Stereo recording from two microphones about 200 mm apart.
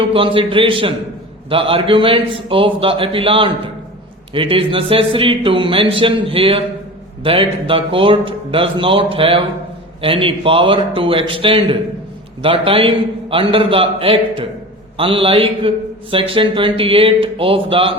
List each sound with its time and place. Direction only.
0.0 s a man's voice: 25° right (ahead or behind)